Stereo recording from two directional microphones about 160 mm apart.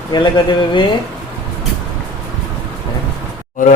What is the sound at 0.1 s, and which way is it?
Speech, 30° left (ahead or behind).